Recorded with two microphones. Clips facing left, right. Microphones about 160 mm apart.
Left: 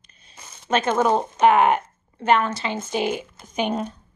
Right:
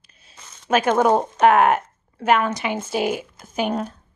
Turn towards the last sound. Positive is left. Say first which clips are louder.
# right 1 dB
turn(degrees=-5)  # may be behind; listen again after turning